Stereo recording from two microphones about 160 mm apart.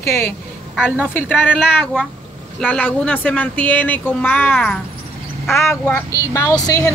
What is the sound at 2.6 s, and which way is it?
Speech, 10° left (ahead or behind).